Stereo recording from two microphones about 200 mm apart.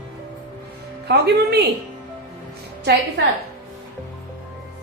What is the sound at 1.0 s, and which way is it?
Speech, 55° right (ahead or behind).